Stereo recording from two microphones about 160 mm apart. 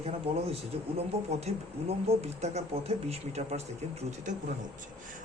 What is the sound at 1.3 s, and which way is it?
Speech, 40° right (ahead or behind).